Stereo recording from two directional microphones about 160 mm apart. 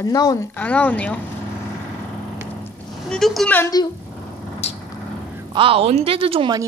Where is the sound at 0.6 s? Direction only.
10° left (ahead or behind).